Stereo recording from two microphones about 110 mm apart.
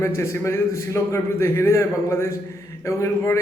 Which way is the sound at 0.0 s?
25° left (ahead or behind).